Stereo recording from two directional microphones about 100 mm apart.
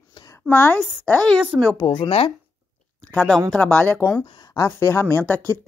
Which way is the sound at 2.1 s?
90° left.